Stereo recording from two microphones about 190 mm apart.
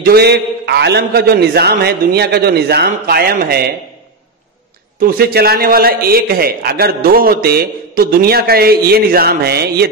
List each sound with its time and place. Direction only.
0.0 s a man's voice: 55° right (ahead or behind)
5.0 s a man's voice: 55° right (ahead or behind)